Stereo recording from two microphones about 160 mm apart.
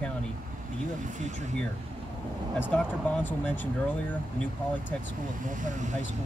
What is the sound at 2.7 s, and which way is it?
Speech, 10° left (ahead or behind).